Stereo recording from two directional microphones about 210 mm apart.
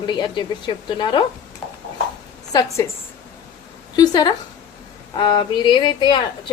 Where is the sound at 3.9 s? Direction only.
20° left (ahead or behind).